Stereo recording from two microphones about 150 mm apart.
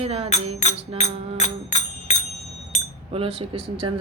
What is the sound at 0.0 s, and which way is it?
Speech, 40° right (ahead or behind).